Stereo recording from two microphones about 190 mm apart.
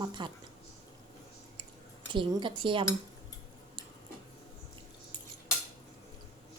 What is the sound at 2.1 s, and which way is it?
Speech, 25° right (ahead or behind).